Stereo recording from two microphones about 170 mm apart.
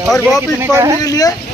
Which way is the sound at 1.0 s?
20° left (ahead or behind).